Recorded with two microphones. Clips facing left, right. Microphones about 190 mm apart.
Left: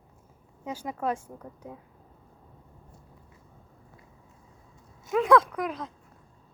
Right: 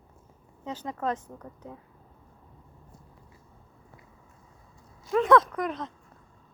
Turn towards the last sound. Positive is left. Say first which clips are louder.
# right 1 dB
turn(degrees=5)  # may be behind; listen again after turning